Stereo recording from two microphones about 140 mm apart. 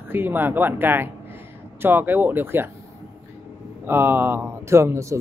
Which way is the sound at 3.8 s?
15° right (ahead or behind).